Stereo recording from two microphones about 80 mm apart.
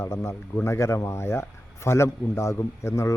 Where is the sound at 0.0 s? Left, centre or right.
Left.